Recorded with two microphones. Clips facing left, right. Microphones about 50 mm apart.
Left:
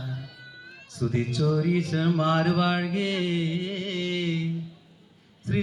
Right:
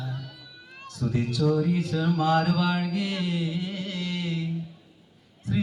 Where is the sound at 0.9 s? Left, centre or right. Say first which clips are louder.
Even; left.